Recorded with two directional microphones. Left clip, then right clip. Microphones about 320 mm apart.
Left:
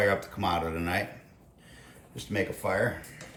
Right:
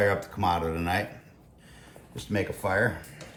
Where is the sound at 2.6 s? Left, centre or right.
Centre.